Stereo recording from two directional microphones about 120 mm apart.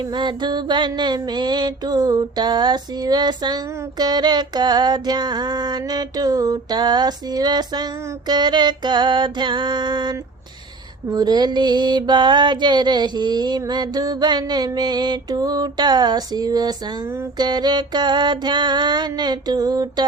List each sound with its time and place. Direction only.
0.0 s mantra: 40° right (ahead or behind)